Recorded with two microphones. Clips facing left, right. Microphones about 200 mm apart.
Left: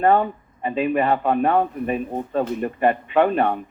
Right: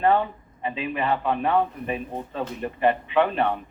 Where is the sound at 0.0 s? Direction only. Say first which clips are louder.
Left 3 dB; 50° left (ahead or behind).